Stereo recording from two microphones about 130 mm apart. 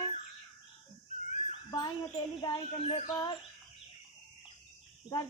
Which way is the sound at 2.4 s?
35° left (ahead or behind).